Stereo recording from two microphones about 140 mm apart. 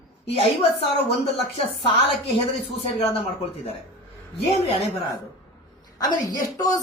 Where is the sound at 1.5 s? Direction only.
40° left (ahead or behind).